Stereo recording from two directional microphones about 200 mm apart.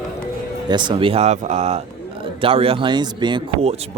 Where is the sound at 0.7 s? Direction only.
25° right (ahead or behind).